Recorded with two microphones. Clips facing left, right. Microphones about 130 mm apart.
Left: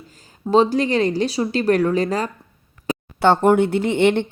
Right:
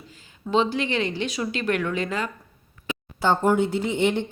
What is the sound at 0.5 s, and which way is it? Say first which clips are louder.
Speech: left 6 dB; 40° left (ahead or behind).